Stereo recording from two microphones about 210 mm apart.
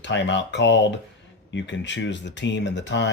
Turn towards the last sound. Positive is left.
turn(degrees=55)  # may be behind; listen again after turning